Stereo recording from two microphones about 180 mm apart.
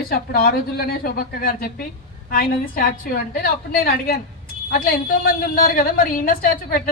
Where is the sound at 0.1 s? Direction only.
55° left (ahead or behind).